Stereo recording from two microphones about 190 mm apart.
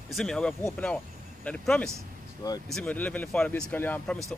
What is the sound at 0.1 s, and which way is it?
Speech, 5° left (ahead or behind).